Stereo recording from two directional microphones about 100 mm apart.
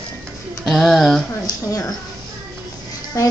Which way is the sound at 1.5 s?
35° left (ahead or behind).